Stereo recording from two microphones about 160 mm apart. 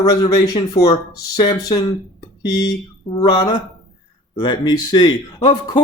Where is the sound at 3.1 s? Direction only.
25° left (ahead or behind).